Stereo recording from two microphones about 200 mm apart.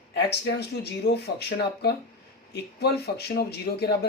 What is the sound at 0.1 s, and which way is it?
Speech, 60° left (ahead or behind).